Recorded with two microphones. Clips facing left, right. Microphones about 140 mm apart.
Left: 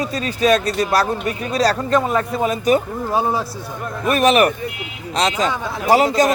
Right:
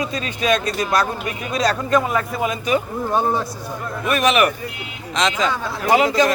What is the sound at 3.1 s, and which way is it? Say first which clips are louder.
Speech: even; 5° left (ahead or behind).